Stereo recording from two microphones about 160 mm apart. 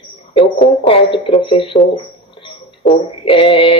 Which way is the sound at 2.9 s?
35° left (ahead or behind).